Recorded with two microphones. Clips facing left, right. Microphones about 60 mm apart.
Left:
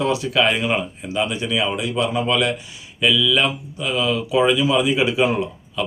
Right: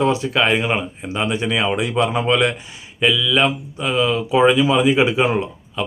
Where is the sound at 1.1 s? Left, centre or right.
Right.